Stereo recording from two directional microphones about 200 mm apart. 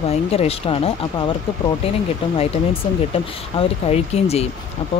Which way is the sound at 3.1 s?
30° left (ahead or behind).